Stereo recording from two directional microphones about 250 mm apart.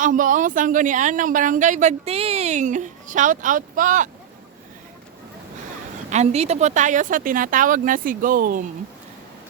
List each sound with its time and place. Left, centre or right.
0.0 s speech: right
6.1 s speech: right